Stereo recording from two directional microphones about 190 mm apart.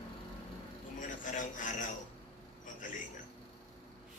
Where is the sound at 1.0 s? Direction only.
40° left (ahead or behind).